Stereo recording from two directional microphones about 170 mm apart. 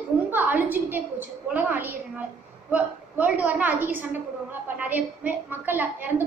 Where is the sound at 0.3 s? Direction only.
10° right (ahead or behind).